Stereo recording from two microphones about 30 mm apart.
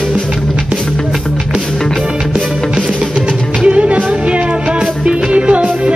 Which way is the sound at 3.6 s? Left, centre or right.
Right.